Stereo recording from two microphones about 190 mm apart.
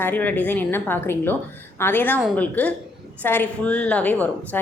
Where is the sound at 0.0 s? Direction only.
10° left (ahead or behind).